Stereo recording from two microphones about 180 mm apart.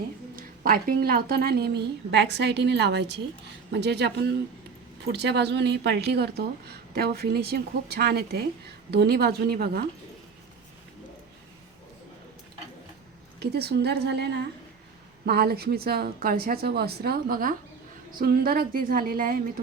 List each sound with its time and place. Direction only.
0.3 s a woman's voice: 55° right (ahead or behind)
13.4 s a woman's voice: 65° right (ahead or behind)